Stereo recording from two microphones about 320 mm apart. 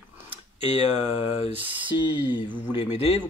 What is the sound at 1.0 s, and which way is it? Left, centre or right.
A man's voice, centre.